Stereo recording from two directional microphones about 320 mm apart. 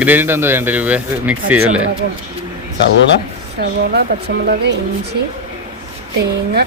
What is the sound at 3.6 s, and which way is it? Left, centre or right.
Speech, right.